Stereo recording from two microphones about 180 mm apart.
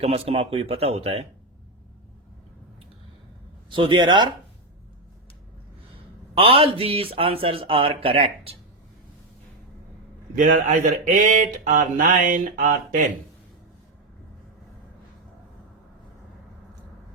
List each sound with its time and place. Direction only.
0.0 s speech: 35° right (ahead or behind)
3.7 s speech: 25° right (ahead or behind)
6.3 s speech: 30° right (ahead or behind)
10.3 s speech: 45° right (ahead or behind)